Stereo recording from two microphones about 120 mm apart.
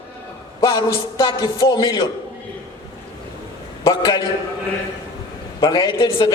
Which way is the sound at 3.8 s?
30° left (ahead or behind).